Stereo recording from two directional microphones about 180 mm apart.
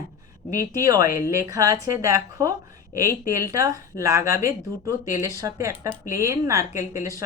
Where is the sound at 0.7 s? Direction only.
20° right (ahead or behind).